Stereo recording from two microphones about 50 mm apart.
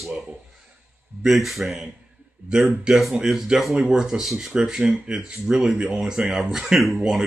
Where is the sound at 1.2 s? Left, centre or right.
Centre.